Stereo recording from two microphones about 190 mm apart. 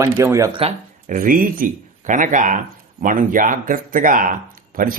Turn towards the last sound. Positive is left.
turn(degrees=-45)  # may be behind; listen again after turning